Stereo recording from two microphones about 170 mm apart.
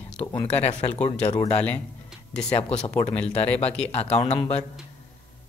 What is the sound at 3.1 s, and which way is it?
Speech, 10° left (ahead or behind).